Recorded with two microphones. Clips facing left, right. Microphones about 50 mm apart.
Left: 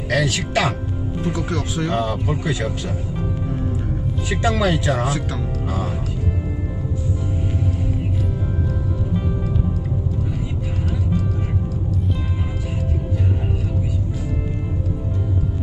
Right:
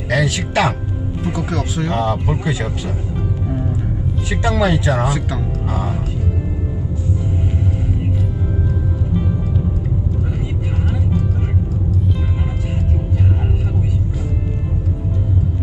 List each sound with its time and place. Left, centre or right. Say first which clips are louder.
0.1 s speech: right 2 dB; centre
2.0 s speech: right 3 dB; centre
4.3 s speech: right 2 dB; centre